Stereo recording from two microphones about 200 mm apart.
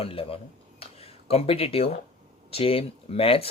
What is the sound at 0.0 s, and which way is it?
Speech, 30° left (ahead or behind).